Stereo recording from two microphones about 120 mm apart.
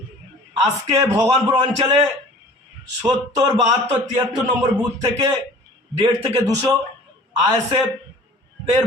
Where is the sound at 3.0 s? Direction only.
30° right (ahead or behind).